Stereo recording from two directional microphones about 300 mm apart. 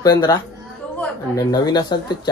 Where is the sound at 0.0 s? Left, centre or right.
Centre.